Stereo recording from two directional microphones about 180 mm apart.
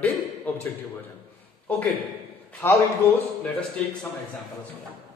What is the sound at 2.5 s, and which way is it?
Speech, 15° left (ahead or behind).